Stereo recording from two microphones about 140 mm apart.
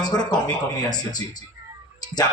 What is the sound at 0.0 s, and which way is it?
Speech, 30° left (ahead or behind).